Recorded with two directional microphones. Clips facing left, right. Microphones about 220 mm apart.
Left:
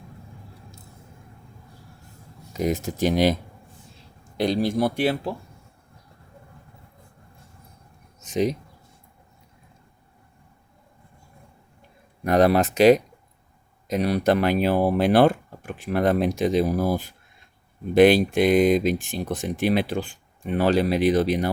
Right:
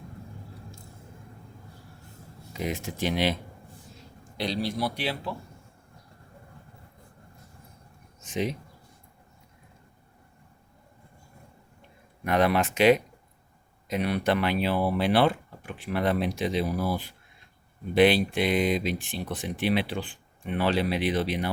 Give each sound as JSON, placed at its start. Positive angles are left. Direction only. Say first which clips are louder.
{"t": 2.5, "sound": "speech", "louder": "left 7 dB", "side_deg": 45}
{"t": 4.4, "sound": "speech", "louder": "left 7 dB", "side_deg": 45}
{"t": 8.2, "sound": "a sound", "louder": "left 6 dB", "side_deg": 40}
{"t": 12.2, "sound": "speech", "louder": "left 5 dB", "side_deg": 40}